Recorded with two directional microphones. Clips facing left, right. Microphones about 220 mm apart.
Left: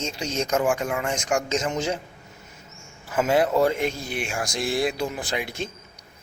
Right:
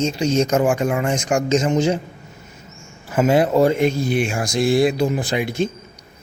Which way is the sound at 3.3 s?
20° right (ahead or behind).